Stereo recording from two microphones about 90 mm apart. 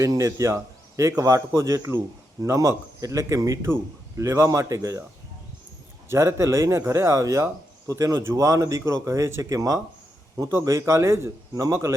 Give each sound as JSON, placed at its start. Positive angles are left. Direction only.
{"t": 0.0, "sound": "speech", "side_deg": -35}
{"t": 6.1, "sound": "speech", "side_deg": -30}